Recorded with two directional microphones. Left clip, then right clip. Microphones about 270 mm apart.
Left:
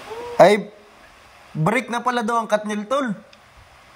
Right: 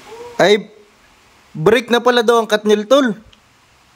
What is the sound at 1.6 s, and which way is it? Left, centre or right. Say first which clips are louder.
A man's voice: right 9 dB; centre.